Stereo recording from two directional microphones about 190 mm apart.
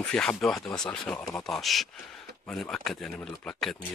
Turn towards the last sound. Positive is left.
turn(degrees=5)  # may be behind; listen again after turning